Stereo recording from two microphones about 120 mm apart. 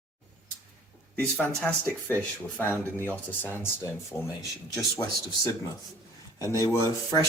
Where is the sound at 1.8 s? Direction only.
15° left (ahead or behind).